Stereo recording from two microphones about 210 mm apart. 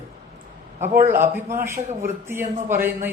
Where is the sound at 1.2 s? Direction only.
10° right (ahead or behind).